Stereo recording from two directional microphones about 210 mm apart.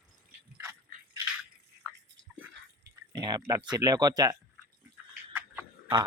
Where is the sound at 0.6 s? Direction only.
15° right (ahead or behind).